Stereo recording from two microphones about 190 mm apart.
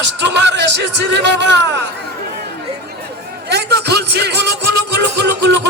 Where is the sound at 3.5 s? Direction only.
60° right (ahead or behind).